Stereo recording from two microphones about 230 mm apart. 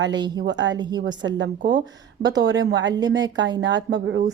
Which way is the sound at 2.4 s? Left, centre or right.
Right.